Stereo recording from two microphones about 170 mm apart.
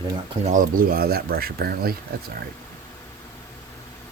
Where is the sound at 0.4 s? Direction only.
50° right (ahead or behind).